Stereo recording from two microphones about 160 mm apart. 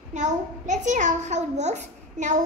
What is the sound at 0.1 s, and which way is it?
A child's voice, 50° right (ahead or behind).